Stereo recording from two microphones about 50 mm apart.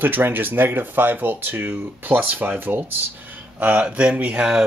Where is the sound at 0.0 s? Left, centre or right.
Right.